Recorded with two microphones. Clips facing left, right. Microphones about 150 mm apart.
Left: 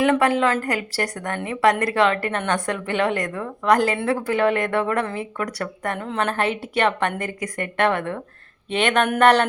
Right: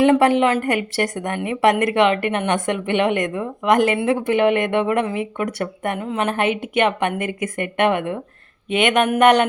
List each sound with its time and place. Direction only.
0.0 s a woman's voice: 25° right (ahead or behind)
6.0 s speech: 10° right (ahead or behind)
6.6 s a woman's voice: 20° right (ahead or behind)